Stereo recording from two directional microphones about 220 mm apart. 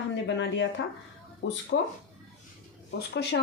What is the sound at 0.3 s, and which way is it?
Speech, 55° left (ahead or behind).